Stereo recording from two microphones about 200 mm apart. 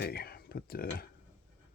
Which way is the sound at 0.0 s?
50° left (ahead or behind).